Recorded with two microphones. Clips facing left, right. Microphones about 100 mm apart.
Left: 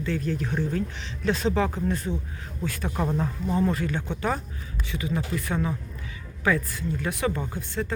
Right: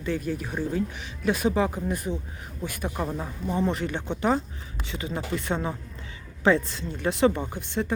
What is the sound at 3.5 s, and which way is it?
Speech, 20° right (ahead or behind).